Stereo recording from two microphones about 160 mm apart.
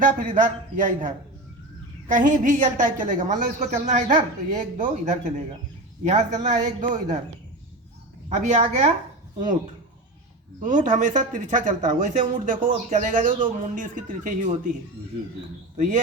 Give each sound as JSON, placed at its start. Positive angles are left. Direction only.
{"t": 0.0, "sound": "a man's voice", "side_deg": -55}
{"t": 8.3, "sound": "speech", "side_deg": -45}
{"t": 10.6, "sound": "speech", "side_deg": -55}